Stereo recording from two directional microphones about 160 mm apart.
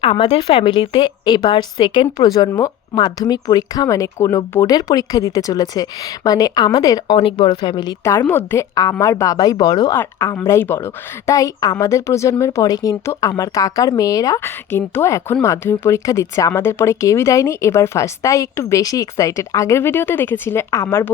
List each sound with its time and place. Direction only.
0.0 s speech: 30° left (ahead or behind)
7.2 s a woman's voice: 35° left (ahead or behind); by 21.1 s 15° left (ahead or behind)